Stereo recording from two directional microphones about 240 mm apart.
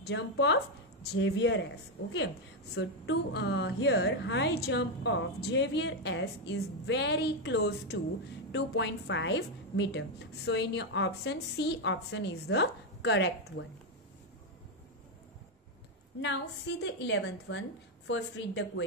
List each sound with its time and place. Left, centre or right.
0.0 s a woman's voice: left
2.7 s a woman's voice: left
16.2 s a woman's voice: left